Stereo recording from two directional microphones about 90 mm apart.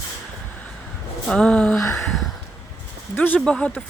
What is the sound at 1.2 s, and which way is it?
Speech, 10° left (ahead or behind).